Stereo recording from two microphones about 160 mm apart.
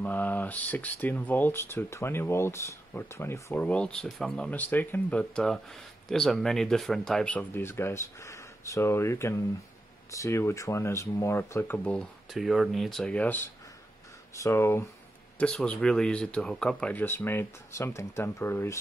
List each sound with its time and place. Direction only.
0.0 s speech: 10° left (ahead or behind)